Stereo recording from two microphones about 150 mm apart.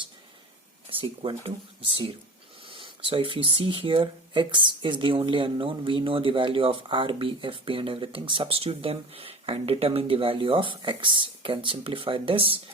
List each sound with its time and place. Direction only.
0.9 s speech: 35° right (ahead or behind)
2.6 s speech: 35° right (ahead or behind)